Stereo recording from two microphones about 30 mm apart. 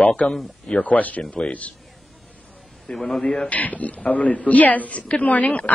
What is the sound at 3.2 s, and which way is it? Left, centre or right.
Speech, left.